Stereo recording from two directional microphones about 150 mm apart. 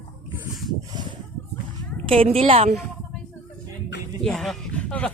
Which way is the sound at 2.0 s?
40° right (ahead or behind).